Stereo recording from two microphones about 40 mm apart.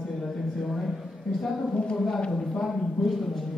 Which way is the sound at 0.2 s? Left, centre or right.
Centre.